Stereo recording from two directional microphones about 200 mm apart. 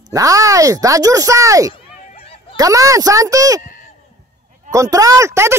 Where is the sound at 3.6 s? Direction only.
40° left (ahead or behind).